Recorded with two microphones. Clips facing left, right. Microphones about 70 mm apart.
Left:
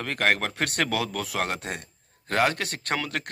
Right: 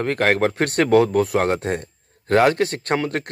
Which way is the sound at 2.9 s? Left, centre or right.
Right.